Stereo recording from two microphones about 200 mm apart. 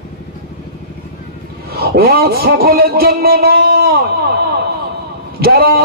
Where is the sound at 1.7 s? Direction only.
50° right (ahead or behind).